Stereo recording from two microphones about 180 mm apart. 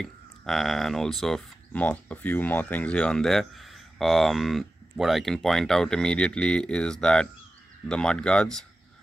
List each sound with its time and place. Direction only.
0.0 s speech: centre (ahead or behind)